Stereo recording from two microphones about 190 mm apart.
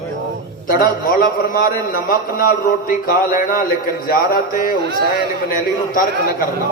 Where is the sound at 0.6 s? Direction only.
50° left (ahead or behind).